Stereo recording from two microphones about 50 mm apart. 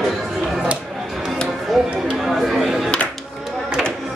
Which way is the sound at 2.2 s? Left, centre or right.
Centre.